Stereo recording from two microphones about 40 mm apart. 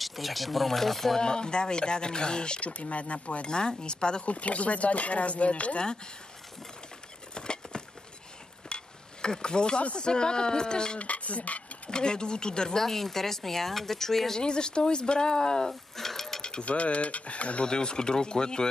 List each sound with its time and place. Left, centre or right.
0.0 s speech: centre
1.2 s speech: left
2.6 s speech: left
3.4 s speech: left
4.3 s speech: left
7.3 s a sound: left
9.9 s speech: left
11.0 s speech: left
11.9 s speech: left
14.4 s speech: left
15.7 s dishes: centre
16.6 s speech: left
17.6 s speech: centre